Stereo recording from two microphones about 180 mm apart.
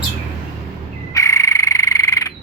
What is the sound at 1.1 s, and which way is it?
Frog, 15° left (ahead or behind).